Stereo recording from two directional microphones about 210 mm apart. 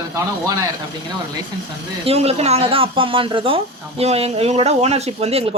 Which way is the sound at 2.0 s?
30° right (ahead or behind).